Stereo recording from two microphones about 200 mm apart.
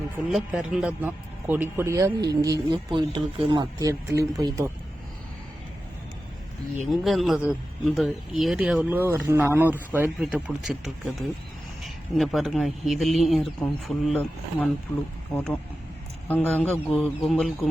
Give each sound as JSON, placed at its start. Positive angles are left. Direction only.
{"t": 0.3, "sound": "a man's voice", "side_deg": 0}
{"t": 6.9, "sound": "speech", "side_deg": 0}
{"t": 16.3, "sound": "speech", "side_deg": 10}